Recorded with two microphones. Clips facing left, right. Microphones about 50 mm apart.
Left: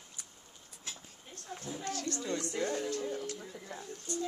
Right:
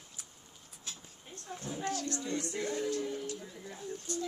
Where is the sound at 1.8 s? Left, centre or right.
Right.